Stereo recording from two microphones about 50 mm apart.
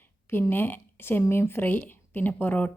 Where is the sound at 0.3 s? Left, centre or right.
Left.